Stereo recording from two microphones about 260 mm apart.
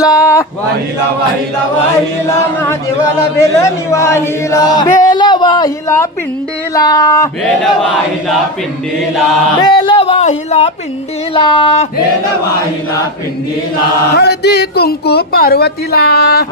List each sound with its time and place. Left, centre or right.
0.0 s a sound: centre
3.9 s chant: centre
7.6 s chant: centre
9.6 s a sound: centre
11.3 s speech: centre
14.1 s speech: left